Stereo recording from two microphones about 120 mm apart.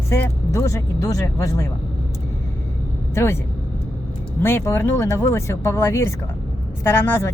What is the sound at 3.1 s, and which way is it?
Speech, 20° left (ahead or behind).